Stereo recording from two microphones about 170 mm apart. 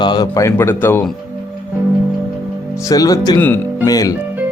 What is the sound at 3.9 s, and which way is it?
Speech, 20° left (ahead or behind).